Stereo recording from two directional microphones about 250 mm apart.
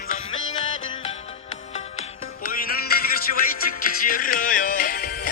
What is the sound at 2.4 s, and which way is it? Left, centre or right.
Music, left.